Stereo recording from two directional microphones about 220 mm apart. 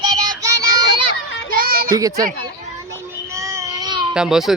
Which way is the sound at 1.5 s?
40° right (ahead or behind).